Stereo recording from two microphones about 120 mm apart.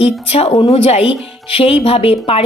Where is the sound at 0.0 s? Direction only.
55° left (ahead or behind).